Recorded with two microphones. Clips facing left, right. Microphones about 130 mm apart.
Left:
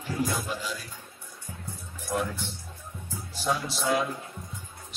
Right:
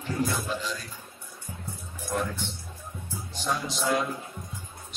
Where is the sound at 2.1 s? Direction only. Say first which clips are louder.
Even; 10° left (ahead or behind).